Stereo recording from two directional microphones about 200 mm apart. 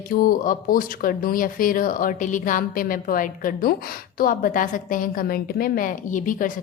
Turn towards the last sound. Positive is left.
turn(degrees=45)  # may be behind; listen again after turning